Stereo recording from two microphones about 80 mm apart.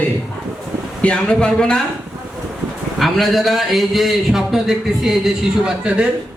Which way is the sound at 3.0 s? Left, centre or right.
Centre.